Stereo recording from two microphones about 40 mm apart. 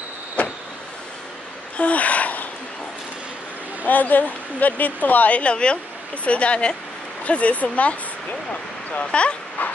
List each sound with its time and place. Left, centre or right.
1.8 s a sound: left
3.8 s speech: left
9.6 s speech: left